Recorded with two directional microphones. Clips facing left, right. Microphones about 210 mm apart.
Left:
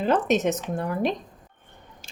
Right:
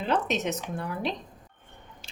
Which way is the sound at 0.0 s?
45° left (ahead or behind).